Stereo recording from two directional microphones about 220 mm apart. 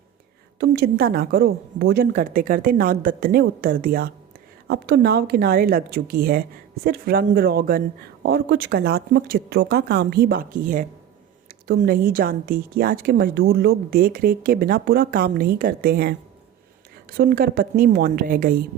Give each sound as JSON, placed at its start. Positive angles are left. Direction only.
{"t": 0.6, "sound": "a woman's voice", "side_deg": -45}